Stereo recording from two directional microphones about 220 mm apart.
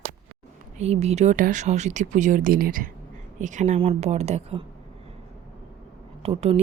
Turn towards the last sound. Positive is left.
turn(degrees=-25)  # may be behind; listen again after turning